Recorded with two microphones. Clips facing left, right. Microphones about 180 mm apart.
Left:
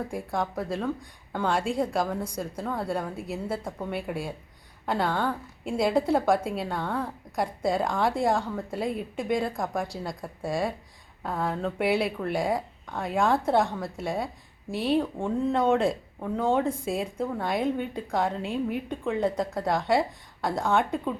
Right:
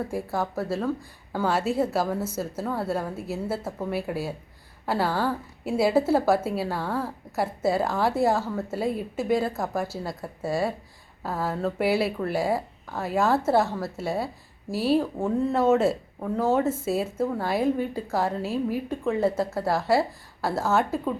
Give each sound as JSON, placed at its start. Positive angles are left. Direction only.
{"t": 0.1, "sound": "speech", "side_deg": -5}